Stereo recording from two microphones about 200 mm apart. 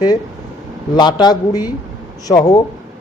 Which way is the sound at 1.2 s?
20° left (ahead or behind).